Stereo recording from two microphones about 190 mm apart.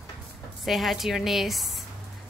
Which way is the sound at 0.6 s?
Centre (ahead or behind).